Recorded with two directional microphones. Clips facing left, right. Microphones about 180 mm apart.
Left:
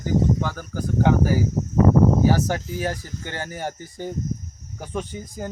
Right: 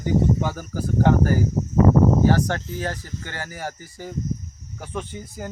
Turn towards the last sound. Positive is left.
turn(degrees=15)  # may be behind; listen again after turning